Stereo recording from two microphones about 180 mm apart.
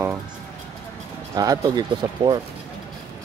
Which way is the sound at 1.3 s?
20° right (ahead or behind).